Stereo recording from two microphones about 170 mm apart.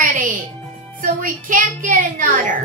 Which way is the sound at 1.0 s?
50° right (ahead or behind).